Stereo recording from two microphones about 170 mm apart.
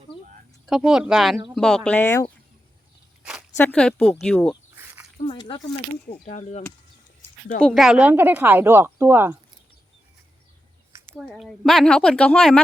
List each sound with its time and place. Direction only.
0.7 s a woman's voice: centre (ahead or behind)
3.6 s a woman's voice: 5° left (ahead or behind)
5.2 s speech: 25° left (ahead or behind)
6.2 s speech: 45° left (ahead or behind)
7.6 s speech: centre (ahead or behind)
11.3 s a woman's voice: centre (ahead or behind)